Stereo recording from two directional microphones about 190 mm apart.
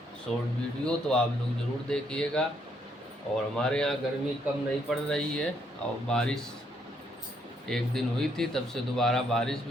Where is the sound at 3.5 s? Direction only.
5° left (ahead or behind).